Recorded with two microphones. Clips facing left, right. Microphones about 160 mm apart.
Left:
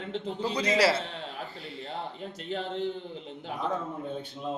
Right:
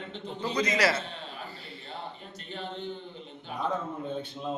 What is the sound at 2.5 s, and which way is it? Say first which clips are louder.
Speech: left 6 dB; 90° left.